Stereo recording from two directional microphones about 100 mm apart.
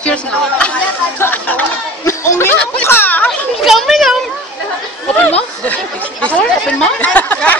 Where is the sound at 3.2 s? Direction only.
Centre (ahead or behind).